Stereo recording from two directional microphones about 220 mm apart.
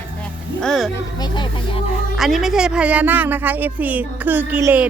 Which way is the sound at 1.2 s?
20° left (ahead or behind).